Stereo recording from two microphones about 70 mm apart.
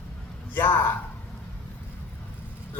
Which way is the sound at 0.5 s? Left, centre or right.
Left.